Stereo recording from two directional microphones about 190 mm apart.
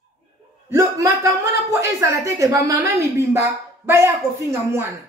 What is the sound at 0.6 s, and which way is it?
Speech, 15° right (ahead or behind).